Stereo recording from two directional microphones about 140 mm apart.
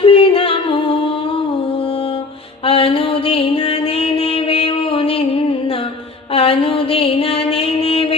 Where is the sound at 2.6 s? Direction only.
40° left (ahead or behind).